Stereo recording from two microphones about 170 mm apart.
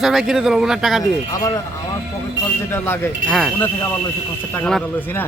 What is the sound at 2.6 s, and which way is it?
Speech, 15° left (ahead or behind).